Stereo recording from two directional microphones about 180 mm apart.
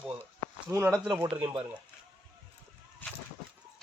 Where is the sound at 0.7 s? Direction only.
15° right (ahead or behind).